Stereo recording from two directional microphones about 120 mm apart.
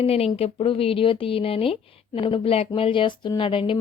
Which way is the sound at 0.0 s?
55° left (ahead or behind).